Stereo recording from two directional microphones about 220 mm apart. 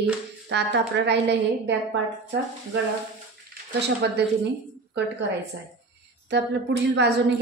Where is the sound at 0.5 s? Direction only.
50° right (ahead or behind).